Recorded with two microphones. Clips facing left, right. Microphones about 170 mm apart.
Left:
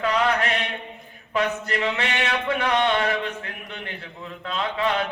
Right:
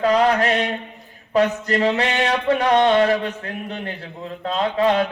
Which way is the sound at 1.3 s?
35° right (ahead or behind).